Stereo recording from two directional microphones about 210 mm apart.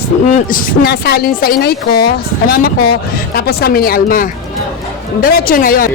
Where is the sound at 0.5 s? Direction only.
50° left (ahead or behind).